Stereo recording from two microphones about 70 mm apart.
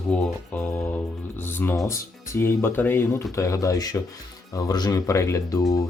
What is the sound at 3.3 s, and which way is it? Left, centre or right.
Speech, left.